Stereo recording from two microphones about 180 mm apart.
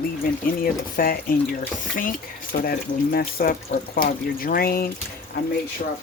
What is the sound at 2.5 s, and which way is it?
Speech, 50° left (ahead or behind).